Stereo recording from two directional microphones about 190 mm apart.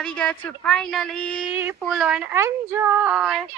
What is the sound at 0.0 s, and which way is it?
Speech, 5° left (ahead or behind).